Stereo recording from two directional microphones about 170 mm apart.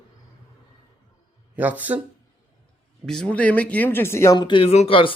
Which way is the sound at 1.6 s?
10° right (ahead or behind).